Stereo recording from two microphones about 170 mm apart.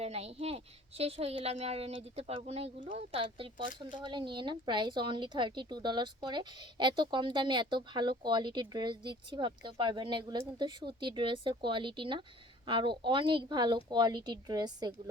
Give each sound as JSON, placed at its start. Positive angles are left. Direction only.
{"t": 0.0, "sound": "a woman's voice", "side_deg": -40}